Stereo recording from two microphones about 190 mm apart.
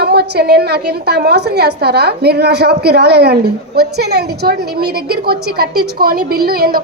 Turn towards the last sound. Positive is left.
turn(degrees=-55)  # may be behind; listen again after turning